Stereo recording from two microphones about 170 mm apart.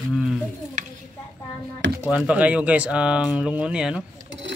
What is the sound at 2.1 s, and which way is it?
Speech, 5° right (ahead or behind).